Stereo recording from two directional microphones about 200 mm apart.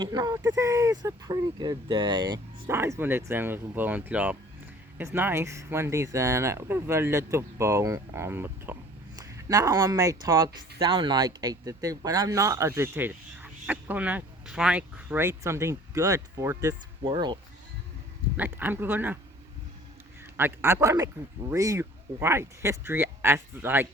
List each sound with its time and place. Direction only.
0.0 s speech: 20° right (ahead or behind)
18.3 s speech: 10° right (ahead or behind)
20.3 s speech: 10° right (ahead or behind)